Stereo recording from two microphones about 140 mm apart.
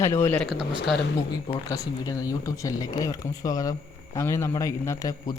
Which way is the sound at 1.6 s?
25° left (ahead or behind).